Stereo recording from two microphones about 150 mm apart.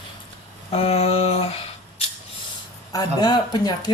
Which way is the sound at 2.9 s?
25° left (ahead or behind).